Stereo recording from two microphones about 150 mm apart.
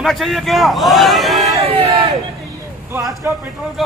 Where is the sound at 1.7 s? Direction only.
40° right (ahead or behind).